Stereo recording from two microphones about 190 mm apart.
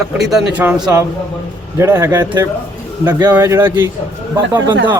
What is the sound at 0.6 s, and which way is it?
Speech, 10° right (ahead or behind).